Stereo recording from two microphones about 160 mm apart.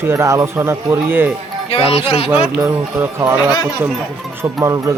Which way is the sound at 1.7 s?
40° left (ahead or behind).